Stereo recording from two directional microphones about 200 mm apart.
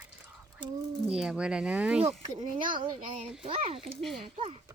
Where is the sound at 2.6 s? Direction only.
25° right (ahead or behind).